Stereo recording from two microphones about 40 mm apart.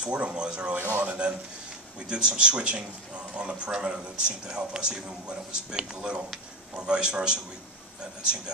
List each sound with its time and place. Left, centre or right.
0.0 s a man's voice: right